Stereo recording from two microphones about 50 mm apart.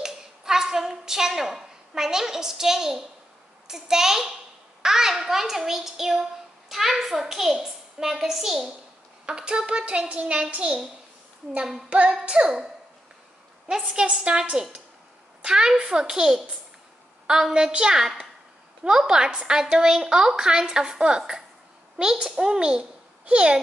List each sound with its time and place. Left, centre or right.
0.0 s a sound: centre
3.6 s a woman's voice: centre
11.5 s a woman's voice: centre
11.9 s a child's voice: right